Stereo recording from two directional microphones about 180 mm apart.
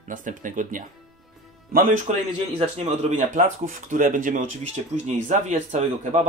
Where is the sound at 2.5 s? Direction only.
35° right (ahead or behind).